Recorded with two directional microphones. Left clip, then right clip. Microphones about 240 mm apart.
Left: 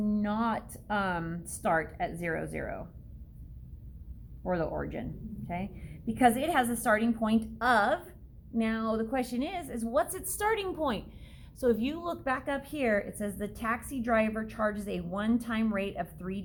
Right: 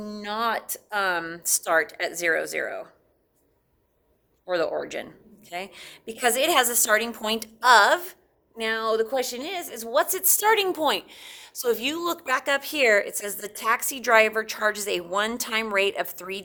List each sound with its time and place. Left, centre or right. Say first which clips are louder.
0.0 s a woman's voice: right 4 dB; right
4.4 s a woman's voice: right 6 dB; right